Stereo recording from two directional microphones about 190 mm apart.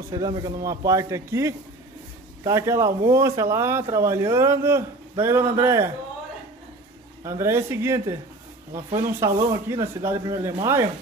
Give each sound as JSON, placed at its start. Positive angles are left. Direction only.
{"t": 0.1, "sound": "speech", "side_deg": -20}
{"t": 7.2, "sound": "speech", "side_deg": -15}